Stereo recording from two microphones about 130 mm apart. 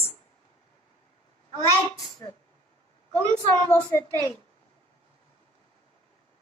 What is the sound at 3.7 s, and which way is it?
Speech, 10° left (ahead or behind).